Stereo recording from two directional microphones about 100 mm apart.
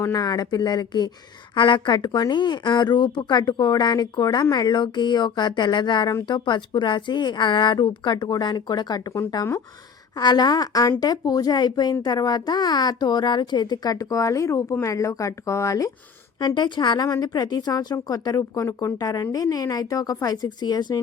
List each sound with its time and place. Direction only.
0.0 s speech: 35° left (ahead or behind)
1.5 s a woman's voice: 55° left (ahead or behind); by 15.9 s 30° left (ahead or behind)
16.6 s a woman's voice: 50° left (ahead or behind)